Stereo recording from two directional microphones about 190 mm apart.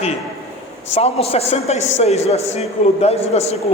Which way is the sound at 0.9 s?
30° left (ahead or behind).